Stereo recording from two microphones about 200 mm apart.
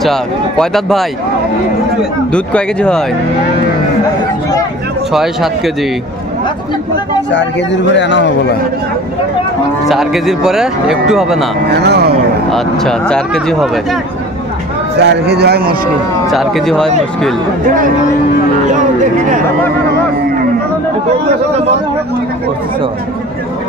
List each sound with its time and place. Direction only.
0.0 s speech: centre (ahead or behind)
2.3 s speech: 5° left (ahead or behind)
5.1 s speech: centre (ahead or behind)
7.3 s a man's voice: 65° left (ahead or behind)
9.8 s speech: centre (ahead or behind)
11.7 s speech: 55° right (ahead or behind)
12.4 s speech: centre (ahead or behind)
15.0 s speech: 55° right (ahead or behind)
16.3 s speech: centre (ahead or behind)